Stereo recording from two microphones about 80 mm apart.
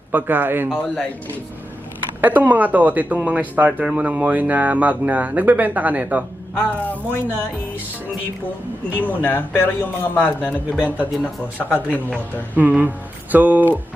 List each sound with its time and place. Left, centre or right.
0.1 s speech: right
2.2 s speech: right
6.6 s a man's voice: left
9.0 s a man's voice: left
10.8 s speech: centre
11.5 s a man's voice: left
12.5 s speech: right